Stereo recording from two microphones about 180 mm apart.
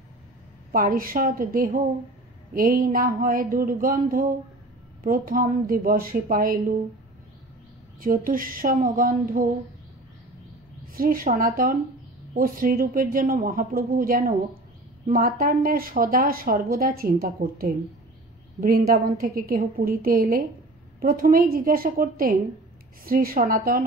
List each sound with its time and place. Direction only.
0.7 s speech: 50° right (ahead or behind)
8.0 s speech: 50° right (ahead or behind)
10.9 s speech: 50° right (ahead or behind)